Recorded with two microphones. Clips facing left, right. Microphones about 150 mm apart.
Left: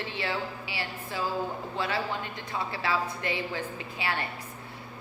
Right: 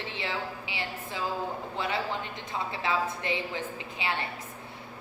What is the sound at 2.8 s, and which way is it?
A woman's voice, 20° right (ahead or behind).